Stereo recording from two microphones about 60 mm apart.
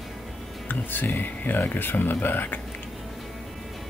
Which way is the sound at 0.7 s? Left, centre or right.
Left.